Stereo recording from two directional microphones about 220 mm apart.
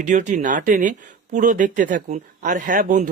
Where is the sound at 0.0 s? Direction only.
35° right (ahead or behind).